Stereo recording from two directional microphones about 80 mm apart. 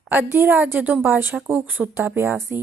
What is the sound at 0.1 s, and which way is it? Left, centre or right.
A woman's voice, right.